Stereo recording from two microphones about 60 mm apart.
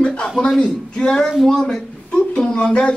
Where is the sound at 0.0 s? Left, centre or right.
Centre.